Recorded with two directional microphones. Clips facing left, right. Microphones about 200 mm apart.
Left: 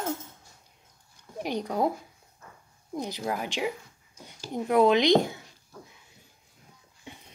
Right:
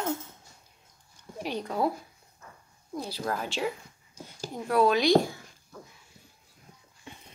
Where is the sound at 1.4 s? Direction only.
15° left (ahead or behind).